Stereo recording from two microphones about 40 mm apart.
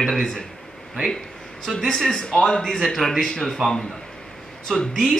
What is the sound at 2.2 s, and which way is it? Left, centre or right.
Speech, centre.